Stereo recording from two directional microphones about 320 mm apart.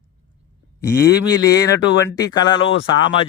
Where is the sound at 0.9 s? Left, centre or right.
Centre.